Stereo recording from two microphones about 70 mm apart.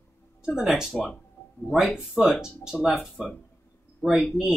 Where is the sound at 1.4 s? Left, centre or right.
Left.